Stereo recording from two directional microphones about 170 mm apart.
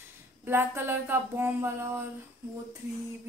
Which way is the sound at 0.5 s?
15° right (ahead or behind).